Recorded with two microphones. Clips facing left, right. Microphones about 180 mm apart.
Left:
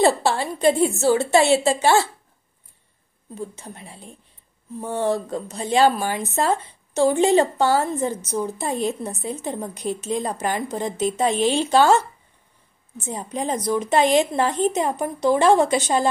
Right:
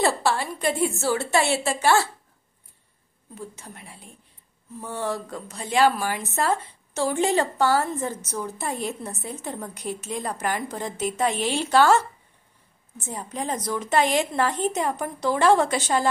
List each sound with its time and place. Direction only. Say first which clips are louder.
0.0 s a woman's voice: left 4 dB; 25° left (ahead or behind)
3.3 s a woman's voice: left 5 dB; 25° left (ahead or behind)
13.0 s a woman's voice: left 4 dB; 20° left (ahead or behind)